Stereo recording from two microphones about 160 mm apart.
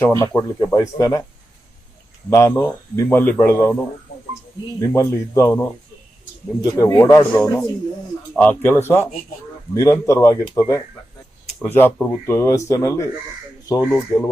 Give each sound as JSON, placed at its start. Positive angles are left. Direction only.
{"t": 0.0, "sound": "speech", "side_deg": 15}
{"t": 2.3, "sound": "speech", "side_deg": 15}
{"t": 4.8, "sound": "speech", "side_deg": 20}
{"t": 11.6, "sound": "speech", "side_deg": 15}